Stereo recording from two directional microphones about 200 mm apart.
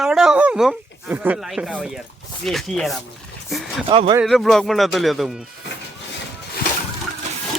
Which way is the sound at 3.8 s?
25° right (ahead or behind).